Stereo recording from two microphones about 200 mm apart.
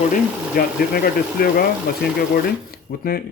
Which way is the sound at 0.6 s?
50° left (ahead or behind).